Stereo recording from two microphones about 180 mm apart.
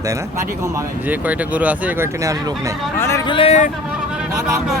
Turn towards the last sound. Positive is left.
turn(degrees=35)  # may be behind; listen again after turning